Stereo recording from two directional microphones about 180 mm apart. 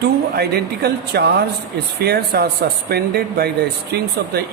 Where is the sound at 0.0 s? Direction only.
65° right (ahead or behind).